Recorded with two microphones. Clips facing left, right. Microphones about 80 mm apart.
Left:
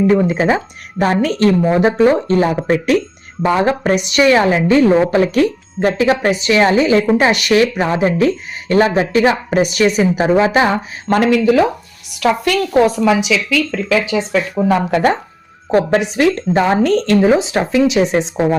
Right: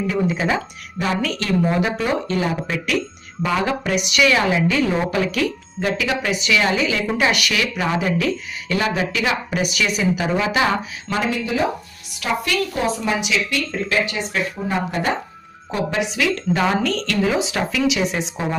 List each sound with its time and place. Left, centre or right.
0.1 s speech: left
11.2 s speech: left
14.7 s speech: left
15.7 s speech: left